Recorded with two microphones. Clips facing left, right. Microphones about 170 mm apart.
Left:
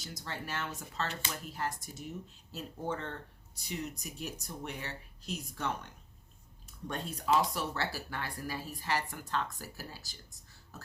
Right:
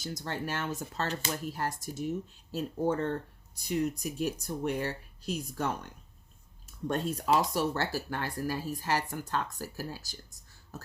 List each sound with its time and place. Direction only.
0.0 s speech: 50° right (ahead or behind)